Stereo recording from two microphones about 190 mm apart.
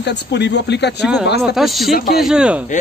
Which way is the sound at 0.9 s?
Centre (ahead or behind).